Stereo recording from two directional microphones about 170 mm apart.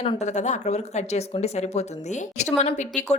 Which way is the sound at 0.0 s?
40° left (ahead or behind).